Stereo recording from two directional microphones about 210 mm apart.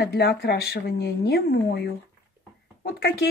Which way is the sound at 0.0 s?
50° left (ahead or behind).